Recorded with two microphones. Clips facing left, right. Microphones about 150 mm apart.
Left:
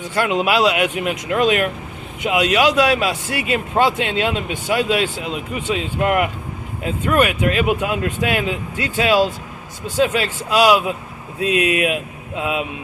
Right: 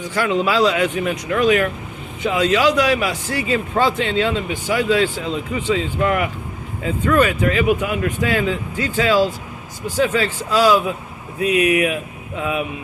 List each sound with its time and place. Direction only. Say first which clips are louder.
0.2 s speech: even; 15° left (ahead or behind)
6.8 s speech: right 1 dB; 20° left (ahead or behind)